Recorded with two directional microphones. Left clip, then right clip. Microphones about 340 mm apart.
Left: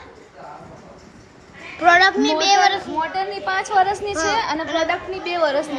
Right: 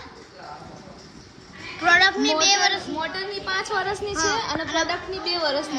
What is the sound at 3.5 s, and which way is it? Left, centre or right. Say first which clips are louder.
Speech: left 7 dB; left.